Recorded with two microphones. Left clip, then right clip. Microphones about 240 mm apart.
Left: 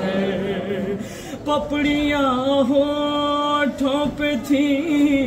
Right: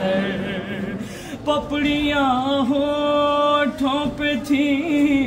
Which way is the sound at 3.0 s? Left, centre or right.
Centre.